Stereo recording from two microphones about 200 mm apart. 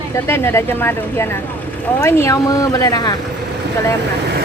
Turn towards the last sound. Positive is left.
turn(degrees=20)  # may be behind; listen again after turning